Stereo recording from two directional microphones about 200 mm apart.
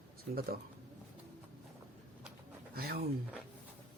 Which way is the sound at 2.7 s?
50° right (ahead or behind).